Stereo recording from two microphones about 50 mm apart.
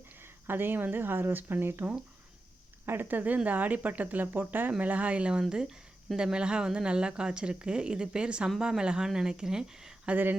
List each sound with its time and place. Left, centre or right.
0.2 s speech: right; by 9.9 s centre